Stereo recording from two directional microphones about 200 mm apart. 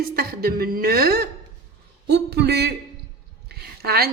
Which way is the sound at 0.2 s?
50° right (ahead or behind).